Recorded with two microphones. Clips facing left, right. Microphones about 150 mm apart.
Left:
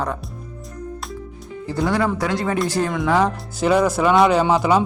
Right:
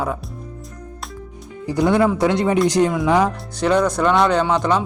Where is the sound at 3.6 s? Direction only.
5° left (ahead or behind).